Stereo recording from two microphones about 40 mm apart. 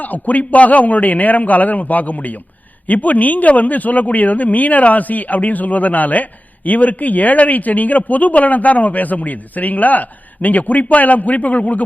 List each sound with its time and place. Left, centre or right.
0.0 s speech: left